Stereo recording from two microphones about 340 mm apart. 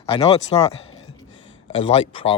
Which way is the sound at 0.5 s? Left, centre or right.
Centre.